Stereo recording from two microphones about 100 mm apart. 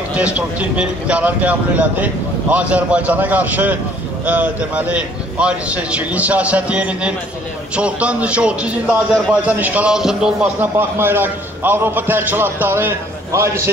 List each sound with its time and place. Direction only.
0.1 s a man's voice: 10° right (ahead or behind)
10.6 s a man's voice: 20° right (ahead or behind)